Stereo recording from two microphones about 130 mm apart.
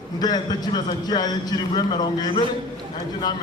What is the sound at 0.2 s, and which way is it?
A man's voice, 30° left (ahead or behind).